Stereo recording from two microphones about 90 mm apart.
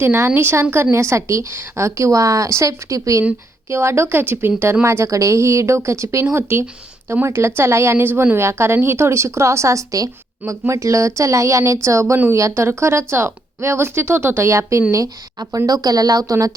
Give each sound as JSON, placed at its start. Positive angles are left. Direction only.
{"t": 0.0, "sound": "a woman's voice", "side_deg": -25}